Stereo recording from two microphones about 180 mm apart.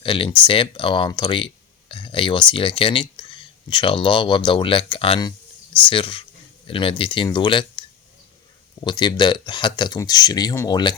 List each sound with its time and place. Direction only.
0.0 s speech: 30° left (ahead or behind)